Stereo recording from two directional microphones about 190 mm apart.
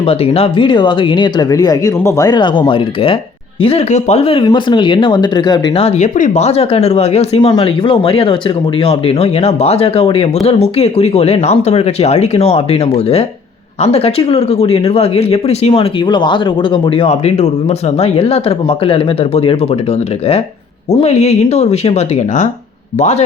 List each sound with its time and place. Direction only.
0.0 s speech: 30° left (ahead or behind)